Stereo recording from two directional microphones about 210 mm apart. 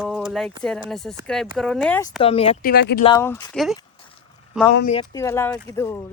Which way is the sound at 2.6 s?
50° left (ahead or behind).